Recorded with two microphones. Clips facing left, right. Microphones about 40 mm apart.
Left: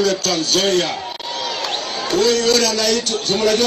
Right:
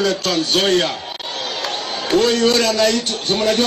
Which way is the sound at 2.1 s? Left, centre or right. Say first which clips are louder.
Right 1 dB; right.